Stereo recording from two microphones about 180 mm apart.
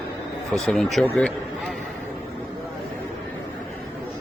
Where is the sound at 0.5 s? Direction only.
5° left (ahead or behind).